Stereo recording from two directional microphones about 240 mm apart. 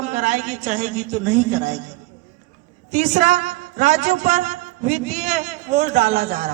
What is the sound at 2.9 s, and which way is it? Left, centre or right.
A man's voice, right.